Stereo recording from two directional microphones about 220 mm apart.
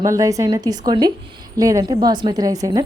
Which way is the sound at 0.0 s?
15° right (ahead or behind).